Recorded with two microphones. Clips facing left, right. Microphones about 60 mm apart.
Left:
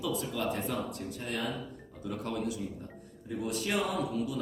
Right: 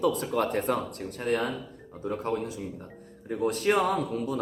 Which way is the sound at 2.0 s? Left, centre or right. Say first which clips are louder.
Right 5 dB; right.